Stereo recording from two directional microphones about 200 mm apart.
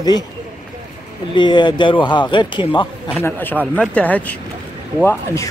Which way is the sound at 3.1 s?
10° left (ahead or behind).